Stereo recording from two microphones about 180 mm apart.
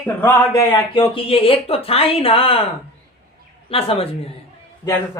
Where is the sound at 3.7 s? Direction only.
30° left (ahead or behind).